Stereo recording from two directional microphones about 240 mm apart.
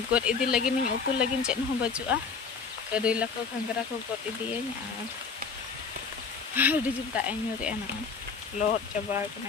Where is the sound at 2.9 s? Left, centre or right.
Centre.